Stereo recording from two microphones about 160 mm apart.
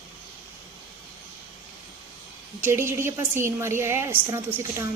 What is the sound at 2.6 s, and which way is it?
A woman's voice, 15° right (ahead or behind).